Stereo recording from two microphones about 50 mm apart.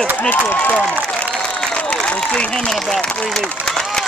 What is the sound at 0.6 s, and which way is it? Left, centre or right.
Speech, left.